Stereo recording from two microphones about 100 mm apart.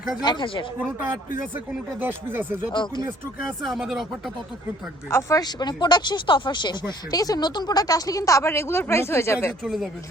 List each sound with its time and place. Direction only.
0.2 s speech: 50° left (ahead or behind)
1.5 s speech: 20° right (ahead or behind)
2.7 s speech: 50° left (ahead or behind)
3.6 s speech: centre (ahead or behind)
5.0 s speech: 25° left (ahead or behind)
5.4 s speech: 45° left (ahead or behind); by 9.6 s 25° left (ahead or behind)
9.6 s speech: centre (ahead or behind)